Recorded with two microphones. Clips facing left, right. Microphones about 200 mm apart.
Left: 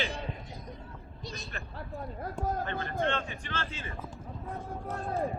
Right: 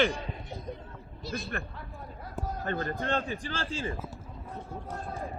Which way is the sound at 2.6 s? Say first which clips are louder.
Right 4 dB; 40° right (ahead or behind).